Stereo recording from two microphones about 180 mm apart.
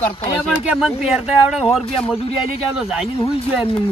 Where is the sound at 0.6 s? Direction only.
5° right (ahead or behind).